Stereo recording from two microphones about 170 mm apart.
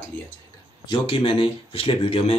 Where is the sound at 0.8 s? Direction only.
30° left (ahead or behind).